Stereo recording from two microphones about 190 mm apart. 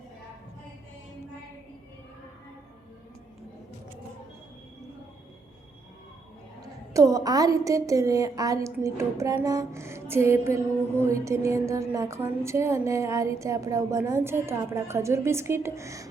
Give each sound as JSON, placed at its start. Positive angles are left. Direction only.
{"t": 6.6, "sound": "a woman's voice", "side_deg": -15}